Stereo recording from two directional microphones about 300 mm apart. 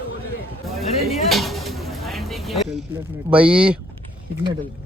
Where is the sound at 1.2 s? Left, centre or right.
Centre.